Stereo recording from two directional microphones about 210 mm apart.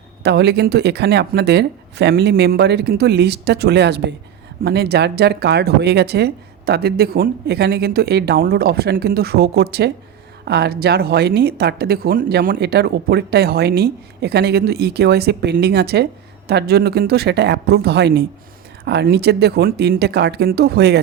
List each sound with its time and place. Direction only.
0.2 s speech: 55° right (ahead or behind)